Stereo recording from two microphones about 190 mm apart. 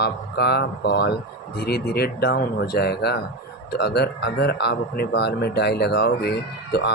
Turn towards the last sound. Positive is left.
turn(degrees=60)  # may be behind; listen again after turning